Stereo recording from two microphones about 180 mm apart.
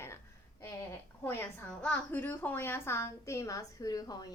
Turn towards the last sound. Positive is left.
turn(degrees=20)  # may be behind; listen again after turning